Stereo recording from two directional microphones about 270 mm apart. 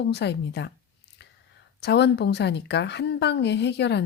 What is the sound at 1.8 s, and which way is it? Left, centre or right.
A woman's voice, left.